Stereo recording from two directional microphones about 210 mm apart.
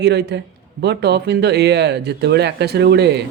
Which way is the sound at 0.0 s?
55° right (ahead or behind).